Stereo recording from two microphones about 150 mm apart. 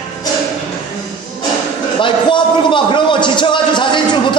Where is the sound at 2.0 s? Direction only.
35° left (ahead or behind).